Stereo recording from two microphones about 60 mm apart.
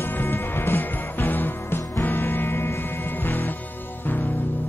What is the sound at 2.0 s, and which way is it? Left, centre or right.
Music, left.